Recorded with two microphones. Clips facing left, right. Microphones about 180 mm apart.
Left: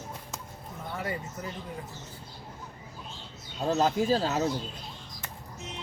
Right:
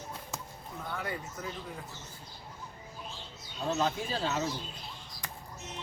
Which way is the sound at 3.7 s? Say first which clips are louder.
Left 7 dB; 40° left (ahead or behind).